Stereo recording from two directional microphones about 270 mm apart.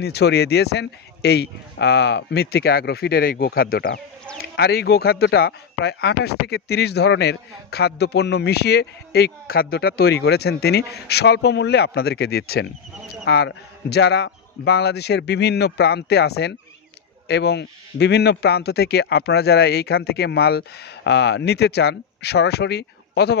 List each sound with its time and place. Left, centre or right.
0.0 s speech: left